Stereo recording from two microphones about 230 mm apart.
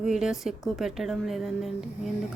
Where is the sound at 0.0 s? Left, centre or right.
Centre.